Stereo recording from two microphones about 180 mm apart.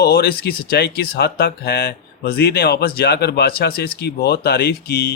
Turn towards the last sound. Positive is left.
turn(degrees=60)  # may be behind; listen again after turning